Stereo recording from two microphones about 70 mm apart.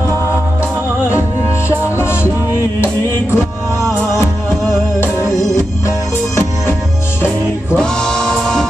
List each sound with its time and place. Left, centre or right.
4.2 s music: left
7.2 s music: centre